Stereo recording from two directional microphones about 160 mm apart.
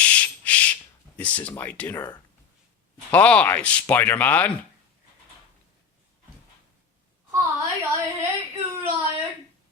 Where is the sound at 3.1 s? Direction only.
10° left (ahead or behind).